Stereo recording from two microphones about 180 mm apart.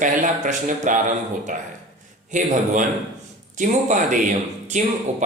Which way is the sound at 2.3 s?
45° right (ahead or behind).